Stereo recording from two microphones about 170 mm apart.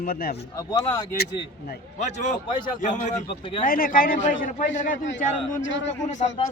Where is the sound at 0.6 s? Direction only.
20° left (ahead or behind).